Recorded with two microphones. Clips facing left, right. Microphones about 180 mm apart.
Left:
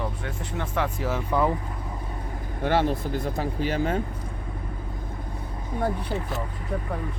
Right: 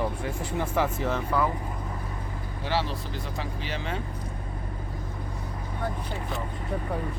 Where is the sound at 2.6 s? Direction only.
50° left (ahead or behind).